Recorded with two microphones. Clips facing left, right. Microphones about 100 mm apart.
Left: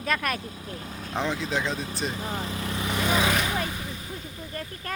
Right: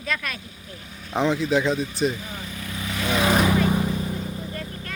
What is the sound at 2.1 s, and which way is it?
Vehicle, 35° left (ahead or behind).